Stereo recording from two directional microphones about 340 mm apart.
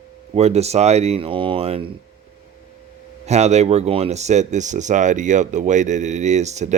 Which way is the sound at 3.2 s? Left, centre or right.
Centre.